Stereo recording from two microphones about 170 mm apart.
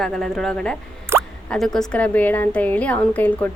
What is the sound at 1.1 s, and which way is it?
Drip, 15° right (ahead or behind).